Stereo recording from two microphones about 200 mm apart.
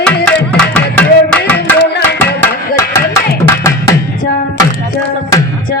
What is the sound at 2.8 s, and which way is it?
Music, 15° left (ahead or behind).